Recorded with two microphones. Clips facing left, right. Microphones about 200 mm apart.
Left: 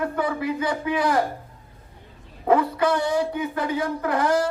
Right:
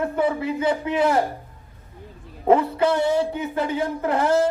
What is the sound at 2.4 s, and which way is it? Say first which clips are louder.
A man's voice: right 2 dB; 25° right (ahead or behind).